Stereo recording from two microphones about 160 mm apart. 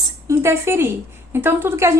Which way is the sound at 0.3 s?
15° right (ahead or behind).